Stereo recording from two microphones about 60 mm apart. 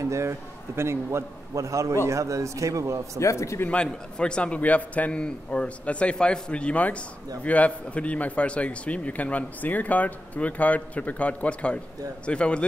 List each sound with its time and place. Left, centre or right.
0.0 s a man's voice: right
3.2 s a man's voice: left
3.6 s a man's voice: centre